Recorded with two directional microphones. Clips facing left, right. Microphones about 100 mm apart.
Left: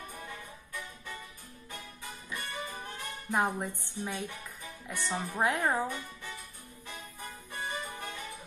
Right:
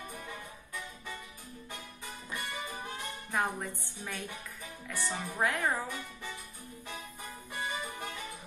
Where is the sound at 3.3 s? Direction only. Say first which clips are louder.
Left 3 dB; 20° left (ahead or behind).